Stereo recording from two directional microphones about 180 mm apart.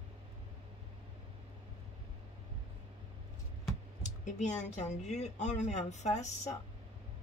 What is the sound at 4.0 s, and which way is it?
A woman's voice, 40° left (ahead or behind).